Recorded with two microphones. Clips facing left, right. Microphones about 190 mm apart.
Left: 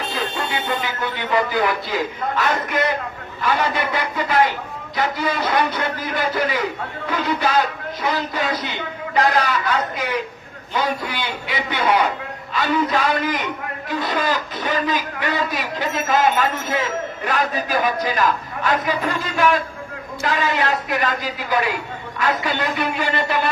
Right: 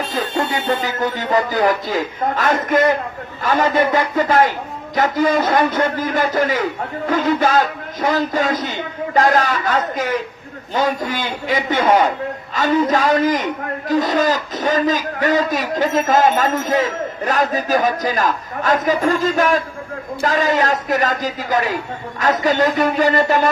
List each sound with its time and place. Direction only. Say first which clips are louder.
0.1 s a man's voice: right 4 dB; 45° right (ahead or behind)